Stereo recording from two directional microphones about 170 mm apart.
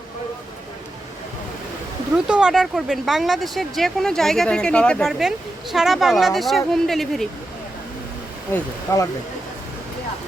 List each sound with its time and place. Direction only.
2.1 s speech: 5° right (ahead or behind)
8.5 s speech: 20° left (ahead or behind)